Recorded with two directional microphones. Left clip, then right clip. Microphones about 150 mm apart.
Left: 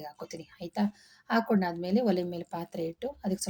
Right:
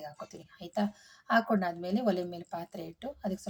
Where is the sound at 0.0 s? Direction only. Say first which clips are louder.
Left 2 dB; 10° left (ahead or behind).